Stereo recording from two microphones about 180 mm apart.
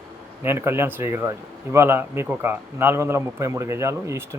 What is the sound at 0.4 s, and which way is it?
Speech, 15° right (ahead or behind).